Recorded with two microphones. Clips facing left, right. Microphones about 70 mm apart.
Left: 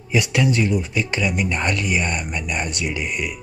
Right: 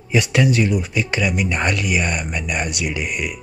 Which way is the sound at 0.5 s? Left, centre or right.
Left.